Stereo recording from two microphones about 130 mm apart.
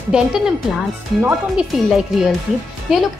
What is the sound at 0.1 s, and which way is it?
Speech, 10° right (ahead or behind).